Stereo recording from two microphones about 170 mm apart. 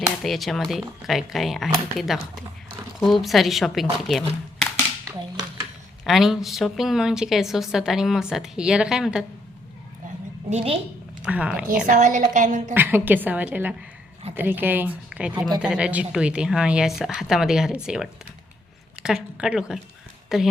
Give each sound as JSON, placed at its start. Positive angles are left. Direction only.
{"t": 0.2, "sound": "a woman's voice", "side_deg": 0}
{"t": 6.1, "sound": "a woman's voice", "side_deg": 0}
{"t": 10.5, "sound": "a woman's voice", "side_deg": -35}
{"t": 11.3, "sound": "a woman's voice", "side_deg": -5}
{"t": 11.9, "sound": "a woman's voice", "side_deg": -50}
{"t": 12.7, "sound": "a woman's voice", "side_deg": -10}